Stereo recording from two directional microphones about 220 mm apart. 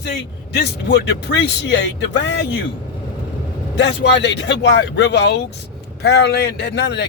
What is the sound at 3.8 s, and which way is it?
Speech, 50° left (ahead or behind).